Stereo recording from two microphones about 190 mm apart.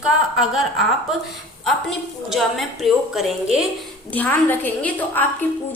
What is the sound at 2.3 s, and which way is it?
A woman's voice, centre (ahead or behind).